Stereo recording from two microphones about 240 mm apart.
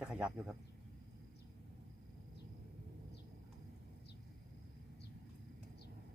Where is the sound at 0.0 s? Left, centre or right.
Centre.